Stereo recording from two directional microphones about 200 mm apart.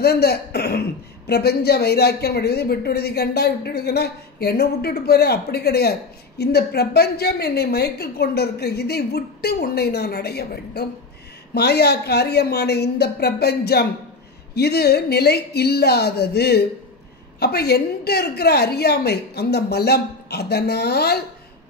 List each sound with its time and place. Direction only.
0.0 s speech: 55° left (ahead or behind)